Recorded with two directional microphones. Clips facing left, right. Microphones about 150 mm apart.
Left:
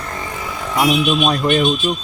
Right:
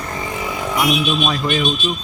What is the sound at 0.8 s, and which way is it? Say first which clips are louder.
Speech: left 4 dB; 35° left (ahead or behind).